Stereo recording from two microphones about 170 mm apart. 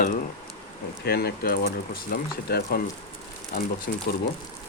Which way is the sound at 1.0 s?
70° left (ahead or behind).